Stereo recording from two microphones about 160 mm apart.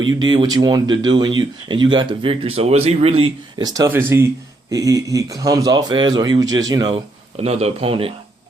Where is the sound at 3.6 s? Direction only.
25° right (ahead or behind).